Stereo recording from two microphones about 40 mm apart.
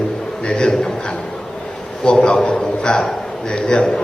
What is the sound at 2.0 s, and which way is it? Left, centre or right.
A man's voice, left.